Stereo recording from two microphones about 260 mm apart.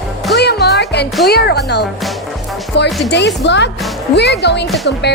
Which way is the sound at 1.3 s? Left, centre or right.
Left.